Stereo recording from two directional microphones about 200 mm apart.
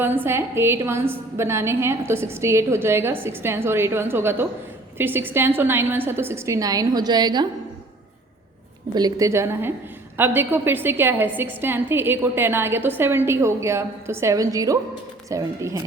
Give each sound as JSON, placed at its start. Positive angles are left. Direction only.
{"t": 0.0, "sound": "a woman's voice", "side_deg": -10}
{"t": 9.0, "sound": "a woman's voice", "side_deg": -20}